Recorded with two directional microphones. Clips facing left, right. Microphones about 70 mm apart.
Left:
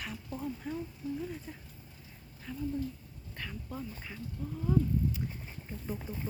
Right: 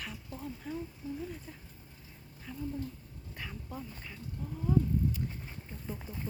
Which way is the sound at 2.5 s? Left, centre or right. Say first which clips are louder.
Left 3 dB; centre.